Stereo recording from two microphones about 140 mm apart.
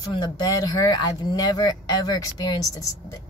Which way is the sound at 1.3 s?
30° left (ahead or behind).